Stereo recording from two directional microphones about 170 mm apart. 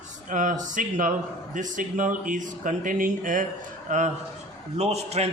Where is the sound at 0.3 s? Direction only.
50° right (ahead or behind).